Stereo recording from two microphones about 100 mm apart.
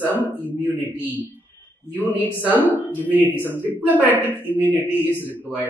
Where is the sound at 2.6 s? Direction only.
20° left (ahead or behind).